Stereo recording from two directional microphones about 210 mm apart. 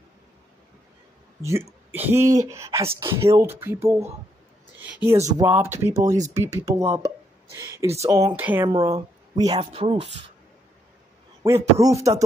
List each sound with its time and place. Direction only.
1.4 s a man's voice: 15° right (ahead or behind)
11.4 s speech: 15° right (ahead or behind)